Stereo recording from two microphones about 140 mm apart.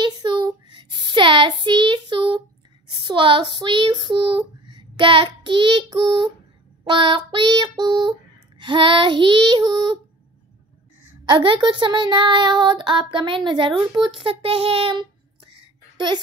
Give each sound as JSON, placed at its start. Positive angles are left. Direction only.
{"t": 0.0, "sound": "child singing", "side_deg": -35}
{"t": 3.0, "sound": "a child's voice", "side_deg": -35}
{"t": 11.2, "sound": "a child's voice", "side_deg": -35}